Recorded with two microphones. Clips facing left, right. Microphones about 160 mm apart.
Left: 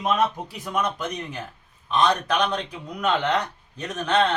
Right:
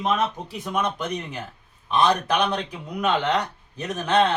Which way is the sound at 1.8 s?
10° right (ahead or behind).